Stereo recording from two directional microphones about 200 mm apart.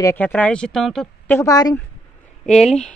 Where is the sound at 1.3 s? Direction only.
20° left (ahead or behind).